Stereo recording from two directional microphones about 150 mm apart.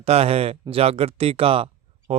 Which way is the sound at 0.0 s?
45° right (ahead or behind).